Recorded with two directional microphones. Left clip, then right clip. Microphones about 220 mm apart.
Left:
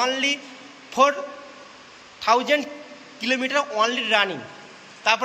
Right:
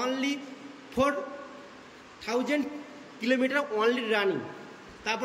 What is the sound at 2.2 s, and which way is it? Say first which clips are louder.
A man's voice: left 10 dB; 5° right (ahead or behind).